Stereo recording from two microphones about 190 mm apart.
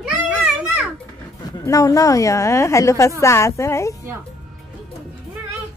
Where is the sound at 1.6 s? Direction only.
15° left (ahead or behind).